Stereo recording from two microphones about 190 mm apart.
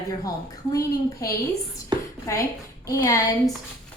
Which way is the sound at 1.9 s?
20° right (ahead or behind).